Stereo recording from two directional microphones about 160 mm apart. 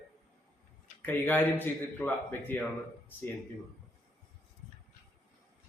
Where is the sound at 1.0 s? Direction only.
10° left (ahead or behind).